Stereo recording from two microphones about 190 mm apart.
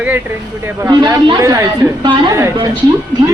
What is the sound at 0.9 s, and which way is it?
A woman's voice, 25° right (ahead or behind).